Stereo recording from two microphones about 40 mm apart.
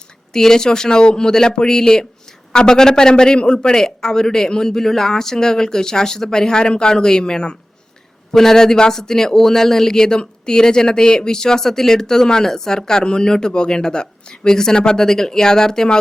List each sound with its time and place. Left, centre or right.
0.3 s speech: centre